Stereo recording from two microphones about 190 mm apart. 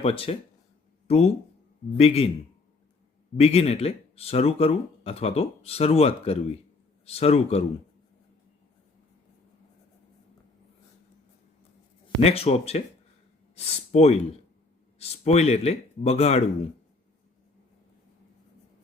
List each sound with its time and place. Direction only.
0.0 s speech: 30° left (ahead or behind)
3.3 s speech: 30° left (ahead or behind)
12.2 s speech: 30° left (ahead or behind)